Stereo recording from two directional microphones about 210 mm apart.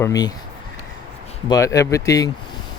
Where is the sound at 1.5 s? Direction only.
15° left (ahead or behind).